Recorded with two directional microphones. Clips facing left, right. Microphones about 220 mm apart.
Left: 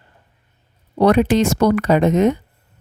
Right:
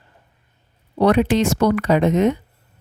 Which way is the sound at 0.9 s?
45° left (ahead or behind).